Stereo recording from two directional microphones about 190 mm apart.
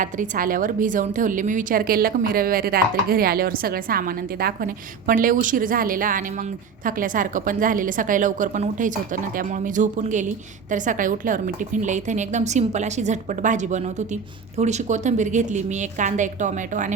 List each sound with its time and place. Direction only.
0.0 s a woman's voice: 45° right (ahead or behind)